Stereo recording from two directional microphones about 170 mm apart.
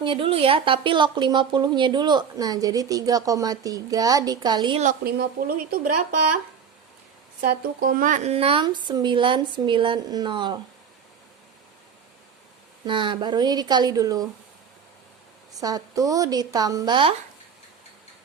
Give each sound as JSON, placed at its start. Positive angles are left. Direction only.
{"t": 0.0, "sound": "speech", "side_deg": -30}
{"t": 5.0, "sound": "speech", "side_deg": -60}
{"t": 7.4, "sound": "speech", "side_deg": -55}
{"t": 12.8, "sound": "speech", "side_deg": -30}
{"t": 15.5, "sound": "speech", "side_deg": -20}